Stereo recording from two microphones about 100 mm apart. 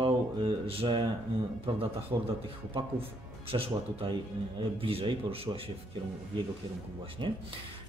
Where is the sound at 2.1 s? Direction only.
40° right (ahead or behind).